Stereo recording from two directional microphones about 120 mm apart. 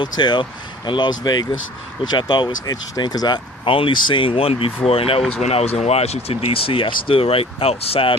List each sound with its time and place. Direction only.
0.0 s speech: 40° left (ahead or behind)